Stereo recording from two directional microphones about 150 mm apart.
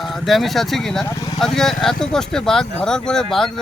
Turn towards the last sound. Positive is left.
turn(degrees=5)  # may be behind; listen again after turning